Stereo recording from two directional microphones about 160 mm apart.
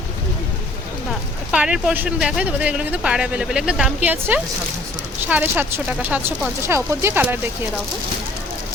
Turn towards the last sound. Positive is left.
turn(degrees=-15)  # may be behind; listen again after turning